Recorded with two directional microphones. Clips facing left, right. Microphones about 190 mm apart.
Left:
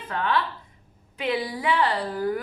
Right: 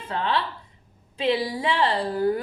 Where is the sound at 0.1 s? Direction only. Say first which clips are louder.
Even; 25° right (ahead or behind).